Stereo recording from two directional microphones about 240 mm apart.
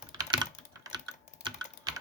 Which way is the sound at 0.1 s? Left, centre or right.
Centre.